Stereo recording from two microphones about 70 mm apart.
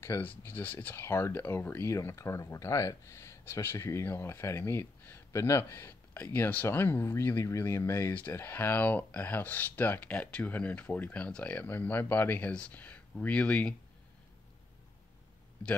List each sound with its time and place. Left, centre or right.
0.0 s speech: left; by 13.7 s centre